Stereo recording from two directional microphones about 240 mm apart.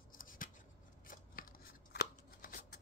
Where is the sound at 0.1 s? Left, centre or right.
Left.